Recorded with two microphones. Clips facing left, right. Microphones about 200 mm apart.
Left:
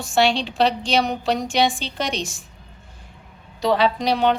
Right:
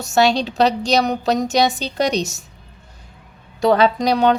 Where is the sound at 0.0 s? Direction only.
40° right (ahead or behind).